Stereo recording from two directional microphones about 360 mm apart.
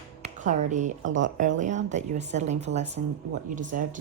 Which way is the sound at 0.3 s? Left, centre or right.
Right.